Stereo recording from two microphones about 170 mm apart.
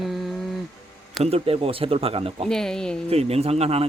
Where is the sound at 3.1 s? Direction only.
35° right (ahead or behind).